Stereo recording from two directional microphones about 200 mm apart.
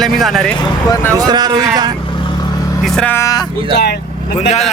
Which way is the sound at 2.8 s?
5° left (ahead or behind).